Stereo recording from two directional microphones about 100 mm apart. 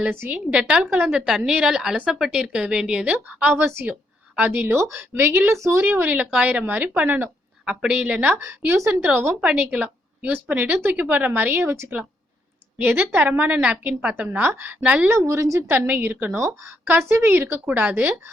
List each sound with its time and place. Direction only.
0.2 s a woman's voice: 15° right (ahead or behind)
15.3 s speech: 30° right (ahead or behind)
15.7 s a woman's voice: 20° right (ahead or behind)